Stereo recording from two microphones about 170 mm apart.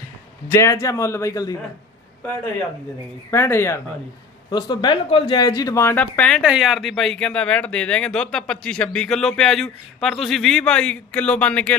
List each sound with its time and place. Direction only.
0.5 s a man's voice: 20° left (ahead or behind)
3.3 s a man's voice: 15° left (ahead or behind)
6.4 s speech: 5° right (ahead or behind)